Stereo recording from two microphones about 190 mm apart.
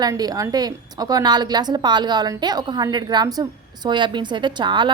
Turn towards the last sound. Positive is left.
turn(degrees=-25)  # may be behind; listen again after turning